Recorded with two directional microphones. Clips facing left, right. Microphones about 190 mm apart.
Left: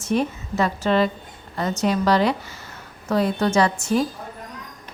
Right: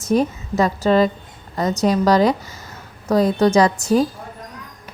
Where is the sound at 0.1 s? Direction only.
40° right (ahead or behind).